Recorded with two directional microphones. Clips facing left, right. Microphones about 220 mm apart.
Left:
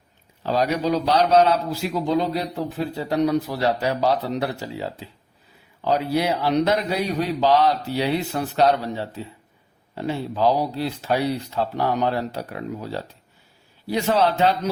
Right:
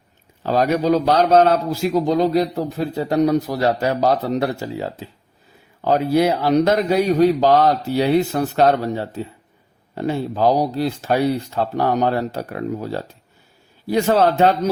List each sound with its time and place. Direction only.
0.4 s a man's voice: 50° right (ahead or behind)